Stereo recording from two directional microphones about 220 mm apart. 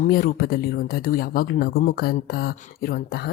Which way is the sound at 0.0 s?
40° left (ahead or behind).